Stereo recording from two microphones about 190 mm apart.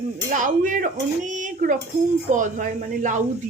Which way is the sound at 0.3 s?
40° right (ahead or behind).